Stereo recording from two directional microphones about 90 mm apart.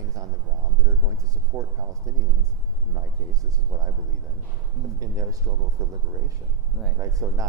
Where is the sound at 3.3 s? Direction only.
45° right (ahead or behind).